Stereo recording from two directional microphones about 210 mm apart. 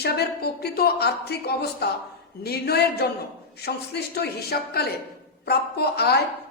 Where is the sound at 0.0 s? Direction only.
50° left (ahead or behind).